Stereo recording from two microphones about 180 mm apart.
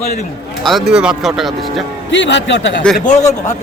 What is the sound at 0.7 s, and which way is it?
Speech, centre (ahead or behind).